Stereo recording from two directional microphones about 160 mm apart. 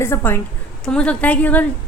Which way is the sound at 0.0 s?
15° left (ahead or behind).